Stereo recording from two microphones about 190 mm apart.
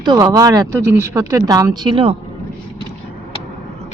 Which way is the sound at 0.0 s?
20° right (ahead or behind).